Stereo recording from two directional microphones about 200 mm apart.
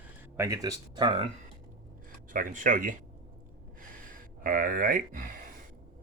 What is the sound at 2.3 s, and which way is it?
Speech, 40° right (ahead or behind).